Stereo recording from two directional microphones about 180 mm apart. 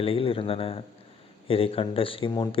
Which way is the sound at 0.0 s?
30° left (ahead or behind).